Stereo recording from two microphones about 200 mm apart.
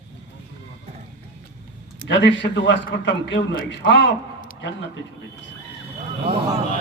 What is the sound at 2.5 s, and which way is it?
Speech, 60° left (ahead or behind).